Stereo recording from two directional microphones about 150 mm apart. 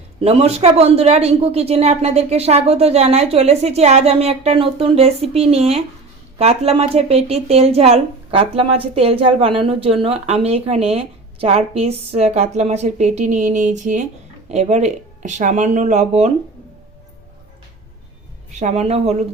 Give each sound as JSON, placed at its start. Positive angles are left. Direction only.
{"t": 0.2, "sound": "speech", "side_deg": -40}
{"t": 18.5, "sound": "speech", "side_deg": -50}